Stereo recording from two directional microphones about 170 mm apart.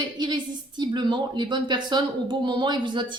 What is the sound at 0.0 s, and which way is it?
A woman's voice, 25° right (ahead or behind).